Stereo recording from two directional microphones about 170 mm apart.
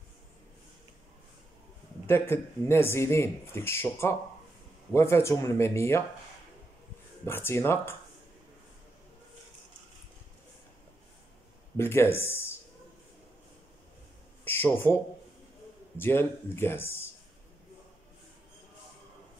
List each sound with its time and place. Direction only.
2.0 s speech: 15° left (ahead or behind)
7.2 s speech: 15° left (ahead or behind)
11.7 s speech: 15° left (ahead or behind)
14.4 s a sound: 10° left (ahead or behind)
16.0 s speech: 15° left (ahead or behind)